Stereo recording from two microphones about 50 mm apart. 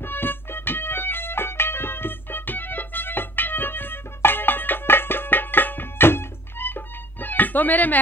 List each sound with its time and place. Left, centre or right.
0.0 s music: left